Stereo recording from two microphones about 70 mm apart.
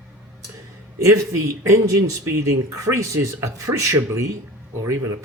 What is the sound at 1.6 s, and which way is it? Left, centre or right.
Speech, right.